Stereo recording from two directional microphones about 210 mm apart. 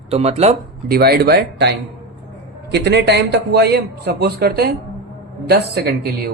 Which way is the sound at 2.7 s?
55° right (ahead or behind).